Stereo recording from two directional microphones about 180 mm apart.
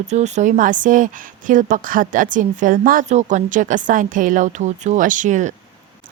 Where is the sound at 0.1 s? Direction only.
40° right (ahead or behind).